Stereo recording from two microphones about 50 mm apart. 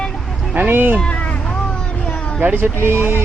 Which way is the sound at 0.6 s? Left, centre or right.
Right.